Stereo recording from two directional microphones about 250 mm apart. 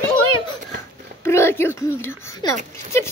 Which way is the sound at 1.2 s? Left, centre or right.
Centre.